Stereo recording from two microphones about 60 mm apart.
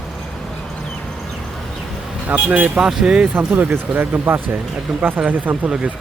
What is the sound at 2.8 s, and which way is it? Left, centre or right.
Speech, centre.